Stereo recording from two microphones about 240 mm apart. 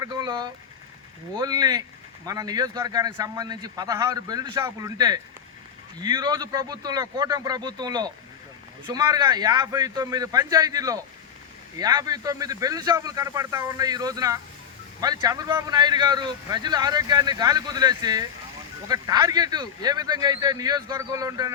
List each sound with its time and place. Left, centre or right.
0.0 s vehicle: centre
1.4 s a man's voice: centre